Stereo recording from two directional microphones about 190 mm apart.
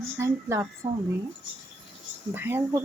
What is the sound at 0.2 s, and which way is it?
Speech, 15° right (ahead or behind).